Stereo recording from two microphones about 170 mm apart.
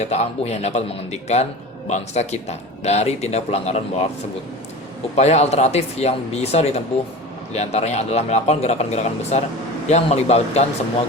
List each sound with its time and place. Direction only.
0.0 s speech: 40° left (ahead or behind)
5.1 s speech: 40° left (ahead or behind)